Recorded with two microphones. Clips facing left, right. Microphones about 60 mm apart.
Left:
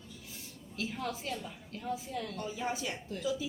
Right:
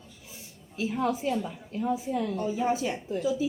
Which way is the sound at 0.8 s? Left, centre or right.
Centre.